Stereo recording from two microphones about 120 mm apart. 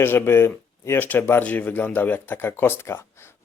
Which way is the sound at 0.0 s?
20° left (ahead or behind).